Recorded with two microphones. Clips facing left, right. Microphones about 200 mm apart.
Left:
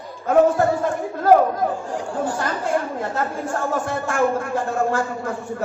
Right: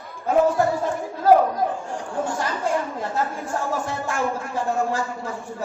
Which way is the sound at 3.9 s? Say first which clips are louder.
Left 5 dB; 55° left (ahead or behind).